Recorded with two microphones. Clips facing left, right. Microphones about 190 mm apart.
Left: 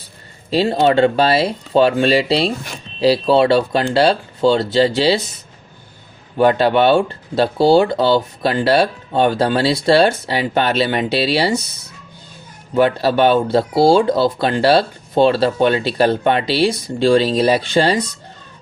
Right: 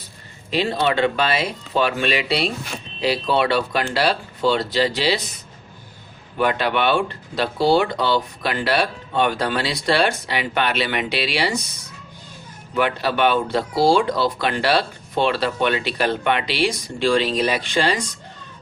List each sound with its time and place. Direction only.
0.5 s speech: 35° left (ahead or behind)
6.3 s speech: 30° left (ahead or behind)
12.7 s speech: 30° left (ahead or behind)